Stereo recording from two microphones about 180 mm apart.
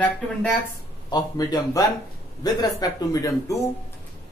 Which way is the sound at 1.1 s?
20° left (ahead or behind).